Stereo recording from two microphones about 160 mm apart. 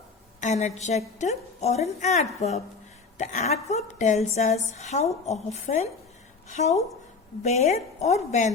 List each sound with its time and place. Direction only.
0.3 s a woman's voice: 50° left (ahead or behind)